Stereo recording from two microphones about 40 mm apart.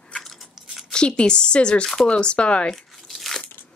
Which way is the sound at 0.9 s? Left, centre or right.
Left.